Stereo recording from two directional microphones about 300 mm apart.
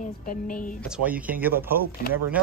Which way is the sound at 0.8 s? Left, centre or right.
Centre.